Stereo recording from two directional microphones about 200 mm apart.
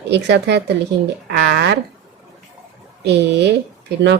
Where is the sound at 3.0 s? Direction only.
60° right (ahead or behind).